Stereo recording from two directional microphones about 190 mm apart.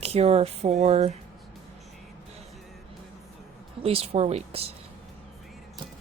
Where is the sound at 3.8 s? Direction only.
30° right (ahead or behind).